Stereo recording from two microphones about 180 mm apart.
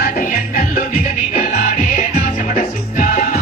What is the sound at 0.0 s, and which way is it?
Music, 50° left (ahead or behind).